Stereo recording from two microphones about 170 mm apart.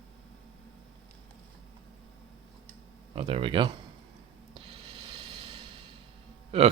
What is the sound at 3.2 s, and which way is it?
Speech, 35° right (ahead or behind).